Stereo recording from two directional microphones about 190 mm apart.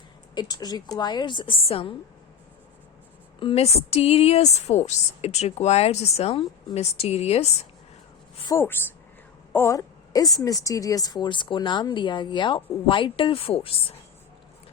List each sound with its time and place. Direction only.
0.3 s a woman's voice: 20° left (ahead or behind)
3.4 s a woman's voice: 35° left (ahead or behind)
8.5 s a woman's voice: 10° left (ahead or behind)
9.5 s a sound: 15° left (ahead or behind)
10.4 s a woman's voice: 15° left (ahead or behind)